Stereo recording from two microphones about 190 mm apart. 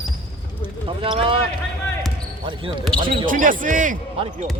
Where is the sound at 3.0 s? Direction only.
45° right (ahead or behind).